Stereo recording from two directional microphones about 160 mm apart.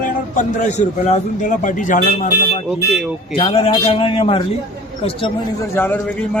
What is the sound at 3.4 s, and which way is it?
A man's voice, 35° left (ahead or behind).